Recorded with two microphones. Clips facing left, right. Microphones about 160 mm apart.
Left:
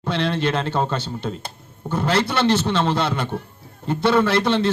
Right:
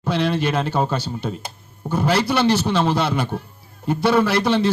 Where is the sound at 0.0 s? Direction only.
5° right (ahead or behind).